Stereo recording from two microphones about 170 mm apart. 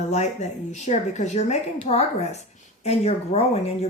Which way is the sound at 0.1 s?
40° left (ahead or behind).